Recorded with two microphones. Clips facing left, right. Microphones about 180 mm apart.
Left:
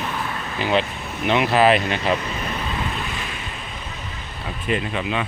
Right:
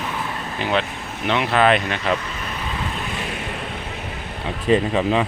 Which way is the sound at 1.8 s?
30° left (ahead or behind).